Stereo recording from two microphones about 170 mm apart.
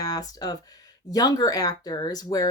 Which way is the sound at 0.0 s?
20° left (ahead or behind).